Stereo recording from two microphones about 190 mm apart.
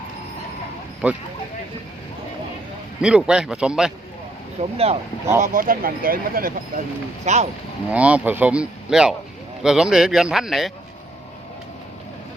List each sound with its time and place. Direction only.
1.0 s speech: 5° right (ahead or behind)
3.0 s speech: 5° right (ahead or behind)
4.6 s speech: 30° right (ahead or behind)
5.4 s speech: 45° right (ahead or behind)
7.3 s speech: 40° right (ahead or behind)
7.9 s speech: 5° right (ahead or behind)